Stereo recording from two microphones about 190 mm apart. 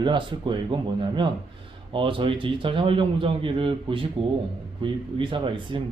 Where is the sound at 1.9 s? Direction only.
25° right (ahead or behind).